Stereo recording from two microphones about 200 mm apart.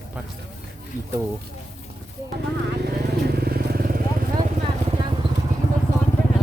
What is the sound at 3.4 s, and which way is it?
Vehicle, 50° right (ahead or behind).